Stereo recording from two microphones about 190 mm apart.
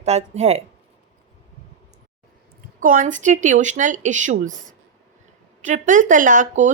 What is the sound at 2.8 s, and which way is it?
A woman's voice, 45° right (ahead or behind).